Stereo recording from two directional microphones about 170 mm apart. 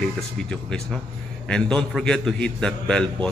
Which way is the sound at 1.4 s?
5° left (ahead or behind).